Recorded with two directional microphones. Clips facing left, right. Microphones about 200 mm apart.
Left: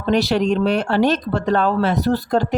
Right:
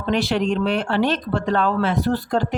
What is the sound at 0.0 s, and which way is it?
Speech, 40° left (ahead or behind).